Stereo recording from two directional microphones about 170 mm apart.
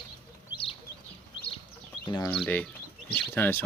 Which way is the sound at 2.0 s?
25° left (ahead or behind).